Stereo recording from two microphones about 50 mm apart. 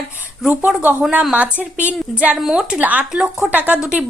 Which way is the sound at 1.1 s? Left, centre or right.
Right.